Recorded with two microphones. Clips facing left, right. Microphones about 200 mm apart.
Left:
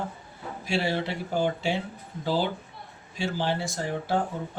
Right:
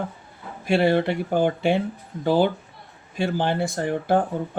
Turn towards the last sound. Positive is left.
turn(degrees=-55)  # may be behind; listen again after turning